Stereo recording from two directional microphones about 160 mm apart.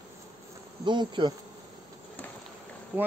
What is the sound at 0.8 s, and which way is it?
Insect, 30° right (ahead or behind).